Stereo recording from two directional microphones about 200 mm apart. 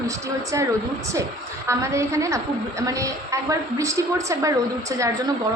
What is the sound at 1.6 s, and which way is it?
A woman's voice, 15° right (ahead or behind).